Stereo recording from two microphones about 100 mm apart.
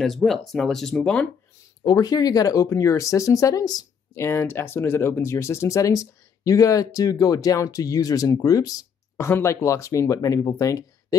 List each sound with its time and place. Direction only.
0.0 s speech: centre (ahead or behind)
1.9 s speech: 40° left (ahead or behind)
4.1 s speech: 25° left (ahead or behind)
9.1 s speech: 25° left (ahead or behind)